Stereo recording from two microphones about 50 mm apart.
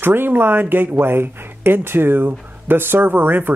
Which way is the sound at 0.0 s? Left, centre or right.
Right.